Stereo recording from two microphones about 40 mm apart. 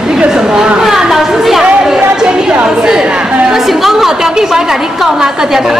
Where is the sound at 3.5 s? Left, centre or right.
Centre.